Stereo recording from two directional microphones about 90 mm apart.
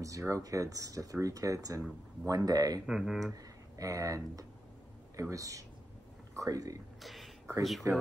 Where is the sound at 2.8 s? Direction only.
5° right (ahead or behind).